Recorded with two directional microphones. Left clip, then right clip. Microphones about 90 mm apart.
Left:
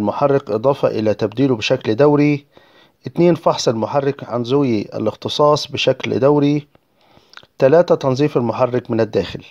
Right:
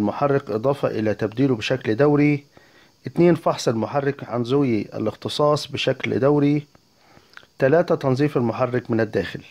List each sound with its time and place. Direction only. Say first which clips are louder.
0.1 s speech: left 9 dB; 40° left (ahead or behind)